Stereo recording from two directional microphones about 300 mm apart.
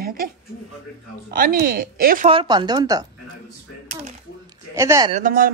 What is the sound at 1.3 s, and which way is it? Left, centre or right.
A woman's voice, right.